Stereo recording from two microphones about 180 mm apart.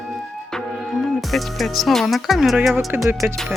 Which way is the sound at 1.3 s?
Centre (ahead or behind).